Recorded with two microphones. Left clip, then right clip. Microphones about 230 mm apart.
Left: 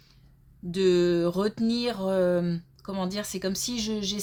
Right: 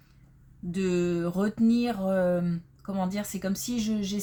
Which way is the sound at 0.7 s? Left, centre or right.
Left.